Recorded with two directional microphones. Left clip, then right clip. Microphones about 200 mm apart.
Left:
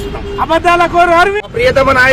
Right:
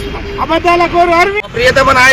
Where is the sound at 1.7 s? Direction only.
20° left (ahead or behind).